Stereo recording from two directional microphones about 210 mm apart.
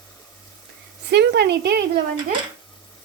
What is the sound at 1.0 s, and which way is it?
Speech, 55° right (ahead or behind).